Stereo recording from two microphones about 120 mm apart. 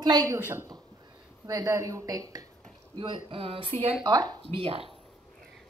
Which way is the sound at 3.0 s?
45° right (ahead or behind).